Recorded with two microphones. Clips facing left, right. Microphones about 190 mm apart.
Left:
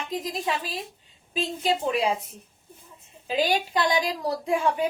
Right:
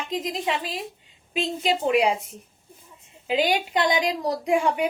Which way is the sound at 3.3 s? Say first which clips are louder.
Right 2 dB; 20° right (ahead or behind).